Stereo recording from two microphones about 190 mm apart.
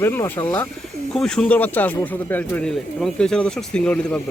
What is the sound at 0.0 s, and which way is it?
Speech, 10° left (ahead or behind).